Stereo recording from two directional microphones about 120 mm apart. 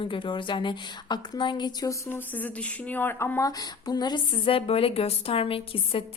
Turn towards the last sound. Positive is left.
turn(degrees=50)  # may be behind; listen again after turning